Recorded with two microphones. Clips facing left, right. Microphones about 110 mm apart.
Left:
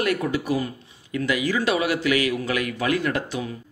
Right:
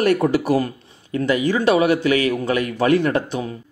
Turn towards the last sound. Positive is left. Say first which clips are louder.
# right 6 dB
turn(degrees=-30)  # may be behind; listen again after turning